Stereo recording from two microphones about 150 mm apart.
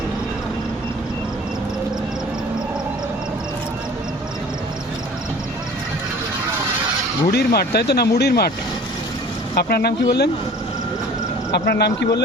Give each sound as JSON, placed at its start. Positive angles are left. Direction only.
{"t": 7.3, "sound": "speech", "side_deg": 90}
{"t": 9.6, "sound": "speech", "side_deg": 90}
{"t": 11.5, "sound": "speech", "side_deg": 90}